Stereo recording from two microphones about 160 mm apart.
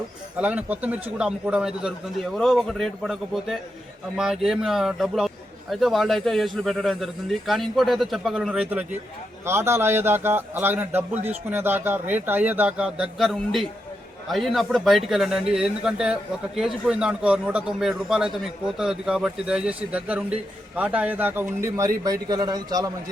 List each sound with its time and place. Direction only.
0.3 s a man's voice: 10° right (ahead or behind); by 22.9 s 25° right (ahead or behind)